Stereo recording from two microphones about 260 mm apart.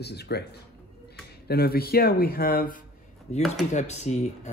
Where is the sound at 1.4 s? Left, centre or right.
Left.